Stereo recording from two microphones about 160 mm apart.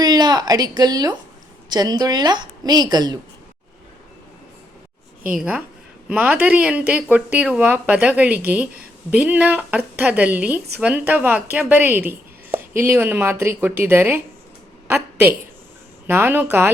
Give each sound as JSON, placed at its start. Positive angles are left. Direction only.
{"t": 0.0, "sound": "a woman's voice", "side_deg": -25}
{"t": 5.3, "sound": "speech", "side_deg": -5}
{"t": 14.8, "sound": "a sound", "side_deg": -10}
{"t": 16.0, "sound": "speech", "side_deg": -15}